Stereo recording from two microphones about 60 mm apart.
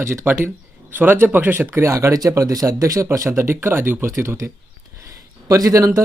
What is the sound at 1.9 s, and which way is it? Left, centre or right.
Speech, right.